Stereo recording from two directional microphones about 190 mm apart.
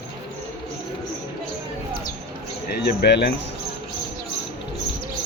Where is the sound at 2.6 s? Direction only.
60° left (ahead or behind).